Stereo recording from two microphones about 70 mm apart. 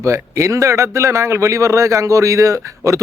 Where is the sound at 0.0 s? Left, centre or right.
Right.